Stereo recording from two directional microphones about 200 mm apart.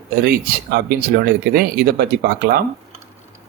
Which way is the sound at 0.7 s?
55° right (ahead or behind).